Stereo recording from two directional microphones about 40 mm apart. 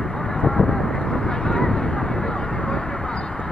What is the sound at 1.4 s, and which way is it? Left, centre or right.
Vehicle, centre.